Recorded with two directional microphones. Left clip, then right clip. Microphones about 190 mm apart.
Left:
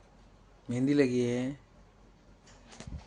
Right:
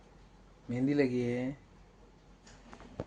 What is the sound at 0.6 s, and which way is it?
Speech, 15° left (ahead or behind).